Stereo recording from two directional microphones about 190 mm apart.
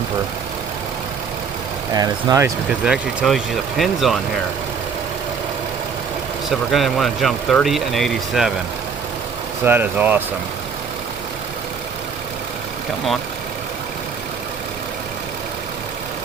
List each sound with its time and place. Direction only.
1.9 s speech: 20° right (ahead or behind)
2.8 s speech: 5° right (ahead or behind)
6.5 s speech: centre (ahead or behind)
9.6 s speech: 10° right (ahead or behind)